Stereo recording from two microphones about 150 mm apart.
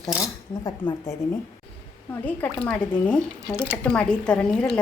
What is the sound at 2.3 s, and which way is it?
A woman's voice, 10° left (ahead or behind).